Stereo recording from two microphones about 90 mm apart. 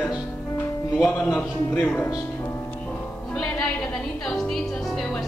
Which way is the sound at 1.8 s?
20° left (ahead or behind).